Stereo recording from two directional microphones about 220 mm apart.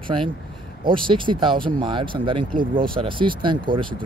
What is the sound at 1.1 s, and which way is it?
Speech, 20° right (ahead or behind).